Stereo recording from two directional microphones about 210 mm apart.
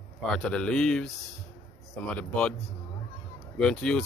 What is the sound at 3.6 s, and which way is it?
Speech, 5° left (ahead or behind).